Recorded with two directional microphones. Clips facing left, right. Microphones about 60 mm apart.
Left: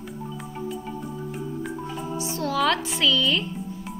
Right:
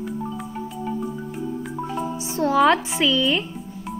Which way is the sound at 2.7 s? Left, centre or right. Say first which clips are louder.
Right 3 dB; right.